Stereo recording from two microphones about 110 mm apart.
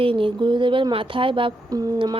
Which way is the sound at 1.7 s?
35° right (ahead or behind).